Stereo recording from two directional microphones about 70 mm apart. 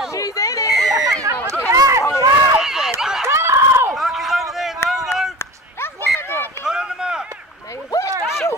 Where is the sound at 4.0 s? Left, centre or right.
Centre.